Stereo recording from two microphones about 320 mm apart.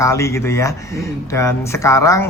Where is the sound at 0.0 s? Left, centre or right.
Centre.